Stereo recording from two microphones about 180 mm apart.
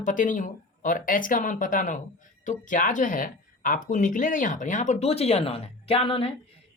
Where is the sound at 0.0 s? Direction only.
45° left (ahead or behind).